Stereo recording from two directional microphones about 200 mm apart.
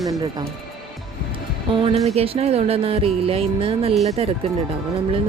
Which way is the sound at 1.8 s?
30° right (ahead or behind).